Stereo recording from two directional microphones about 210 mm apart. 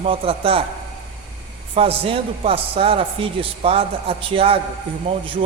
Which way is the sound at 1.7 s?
25° right (ahead or behind).